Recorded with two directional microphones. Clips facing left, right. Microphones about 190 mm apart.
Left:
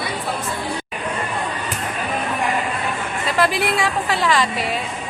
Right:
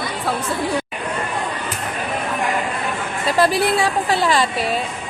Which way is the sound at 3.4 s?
30° right (ahead or behind).